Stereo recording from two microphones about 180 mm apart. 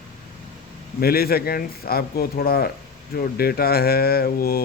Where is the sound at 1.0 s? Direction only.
60° left (ahead or behind).